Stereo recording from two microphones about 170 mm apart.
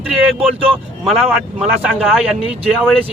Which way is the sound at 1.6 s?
Centre (ahead or behind).